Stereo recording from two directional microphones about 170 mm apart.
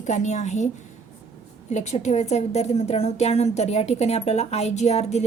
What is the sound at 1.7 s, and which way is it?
A woman's voice, 45° left (ahead or behind).